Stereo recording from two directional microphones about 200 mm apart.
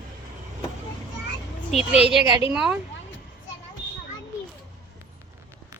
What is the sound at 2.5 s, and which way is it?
Speech, 5° right (ahead or behind).